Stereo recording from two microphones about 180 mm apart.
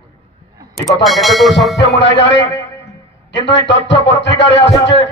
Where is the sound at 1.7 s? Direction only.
75° left (ahead or behind).